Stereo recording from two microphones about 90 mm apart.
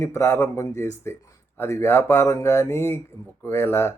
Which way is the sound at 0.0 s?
30° left (ahead or behind).